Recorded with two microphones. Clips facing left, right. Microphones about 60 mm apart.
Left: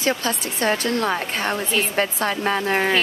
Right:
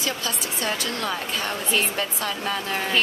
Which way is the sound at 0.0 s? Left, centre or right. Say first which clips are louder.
Left 6 dB; left.